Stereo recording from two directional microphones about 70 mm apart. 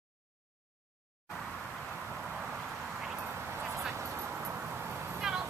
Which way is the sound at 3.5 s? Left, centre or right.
Right.